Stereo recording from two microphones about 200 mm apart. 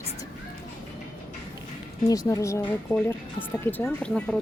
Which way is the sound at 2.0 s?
15° left (ahead or behind).